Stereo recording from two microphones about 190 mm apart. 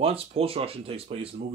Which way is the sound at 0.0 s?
30° right (ahead or behind).